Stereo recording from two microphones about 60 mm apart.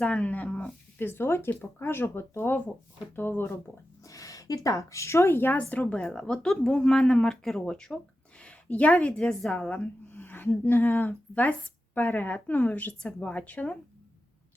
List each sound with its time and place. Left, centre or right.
0.0 s a woman's voice: left
0.9 s speech: left
4.0 s a woman's voice: left
5.5 s a woman's voice: left
6.0 s a woman's voice: centre
9.6 s a woman's voice: left